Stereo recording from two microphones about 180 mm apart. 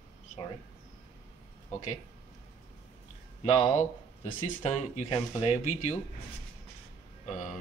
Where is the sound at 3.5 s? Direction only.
40° left (ahead or behind).